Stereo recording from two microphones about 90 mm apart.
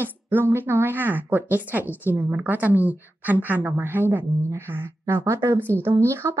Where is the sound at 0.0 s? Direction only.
25° right (ahead or behind).